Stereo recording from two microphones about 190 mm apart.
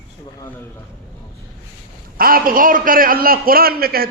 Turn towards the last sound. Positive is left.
turn(degrees=-50)  # may be behind; listen again after turning